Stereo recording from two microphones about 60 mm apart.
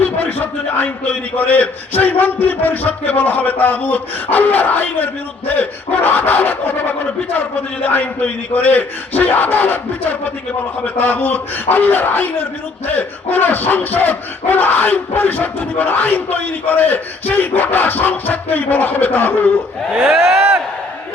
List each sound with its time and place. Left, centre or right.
0.0 s a man's voice: left